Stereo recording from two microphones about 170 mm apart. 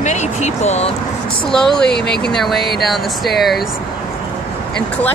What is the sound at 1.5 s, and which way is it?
Speech, 5° left (ahead or behind).